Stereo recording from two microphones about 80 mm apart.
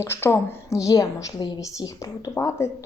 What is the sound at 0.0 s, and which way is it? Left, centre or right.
A woman's voice, left.